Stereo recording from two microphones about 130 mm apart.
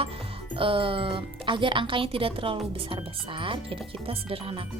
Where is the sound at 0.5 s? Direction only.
45° right (ahead or behind).